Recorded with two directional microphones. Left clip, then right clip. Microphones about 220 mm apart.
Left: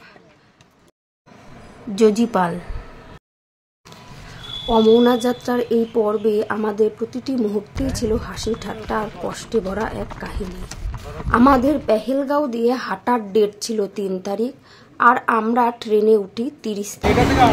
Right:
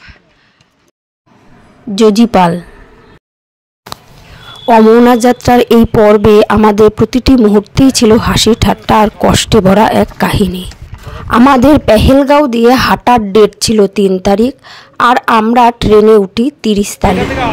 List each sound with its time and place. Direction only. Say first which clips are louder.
2.0 s a woman's voice: right 9 dB; 35° right (ahead or behind)
4.6 s a woman's voice: right 9 dB; 45° right (ahead or behind)